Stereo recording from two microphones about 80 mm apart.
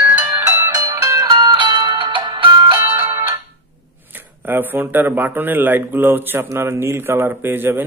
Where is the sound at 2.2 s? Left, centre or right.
Right.